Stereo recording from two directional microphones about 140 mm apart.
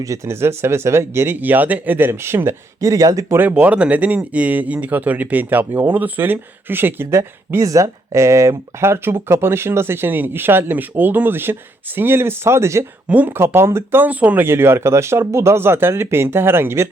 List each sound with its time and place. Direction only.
0.0 s speech: 20° right (ahead or behind)